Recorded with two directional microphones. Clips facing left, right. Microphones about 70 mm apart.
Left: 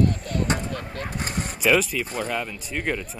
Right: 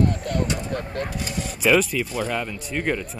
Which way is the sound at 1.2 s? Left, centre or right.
Left.